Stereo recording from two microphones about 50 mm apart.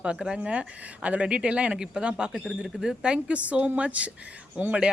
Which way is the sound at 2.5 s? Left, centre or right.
Centre.